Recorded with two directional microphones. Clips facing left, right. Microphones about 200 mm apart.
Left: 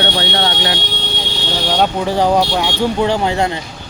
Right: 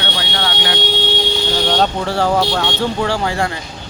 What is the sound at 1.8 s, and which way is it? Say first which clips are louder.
Speech: left 2 dB; 15° left (ahead or behind).